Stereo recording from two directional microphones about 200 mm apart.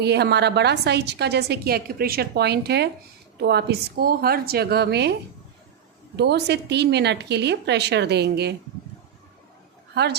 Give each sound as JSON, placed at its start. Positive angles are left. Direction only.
{"t": 0.0, "sound": "a woman's voice", "side_deg": -55}
{"t": 6.1, "sound": "a woman's voice", "side_deg": -55}
{"t": 9.9, "sound": "a woman's voice", "side_deg": -55}